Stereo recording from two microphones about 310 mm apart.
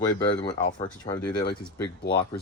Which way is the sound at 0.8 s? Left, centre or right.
Centre.